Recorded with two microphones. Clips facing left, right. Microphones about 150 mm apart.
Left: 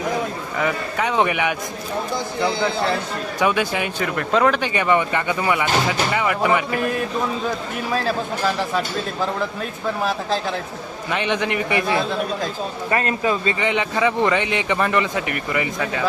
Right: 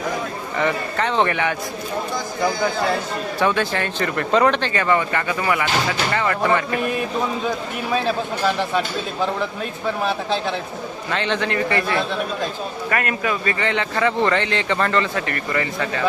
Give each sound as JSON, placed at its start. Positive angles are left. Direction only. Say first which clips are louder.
{"t": 0.6, "sound": "a man's voice", "louder": "right 1 dB", "side_deg": 10}
{"t": 3.4, "sound": "a man's voice", "louder": "even", "side_deg": 10}
{"t": 4.6, "sound": "a man's voice", "louder": "left 1 dB", "side_deg": 15}
{"t": 6.7, "sound": "a man's voice", "louder": "even", "side_deg": 0}
{"t": 10.0, "sound": "a man's voice", "louder": "even", "side_deg": 5}
{"t": 11.1, "sound": "a man's voice", "louder": "left 1 dB", "side_deg": 15}
{"t": 12.9, "sound": "a man's voice", "louder": "left 2 dB", "side_deg": 25}